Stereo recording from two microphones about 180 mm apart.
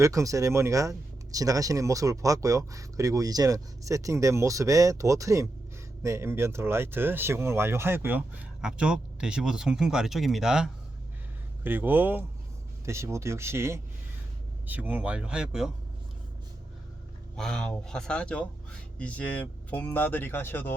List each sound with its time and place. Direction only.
0.0 s speech: 15° right (ahead or behind)
17.3 s speech: 5° left (ahead or behind)